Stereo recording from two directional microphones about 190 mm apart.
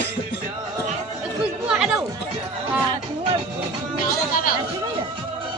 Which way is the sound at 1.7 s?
5° right (ahead or behind).